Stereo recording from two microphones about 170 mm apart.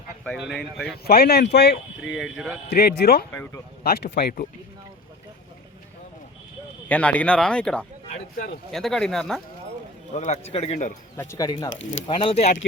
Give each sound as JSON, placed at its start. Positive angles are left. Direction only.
{"t": 0.3, "sound": "speech", "side_deg": 0}
{"t": 0.9, "sound": "speech", "side_deg": 65}
{"t": 2.0, "sound": "speech", "side_deg": 0}
{"t": 2.6, "sound": "speech", "side_deg": 70}
{"t": 6.8, "sound": "speech", "side_deg": 10}
{"t": 10.1, "sound": "a man's voice", "side_deg": 45}
{"t": 11.2, "sound": "speech", "side_deg": 20}
{"t": 11.7, "sound": "speech", "side_deg": 90}
{"t": 12.0, "sound": "a man's voice", "side_deg": 30}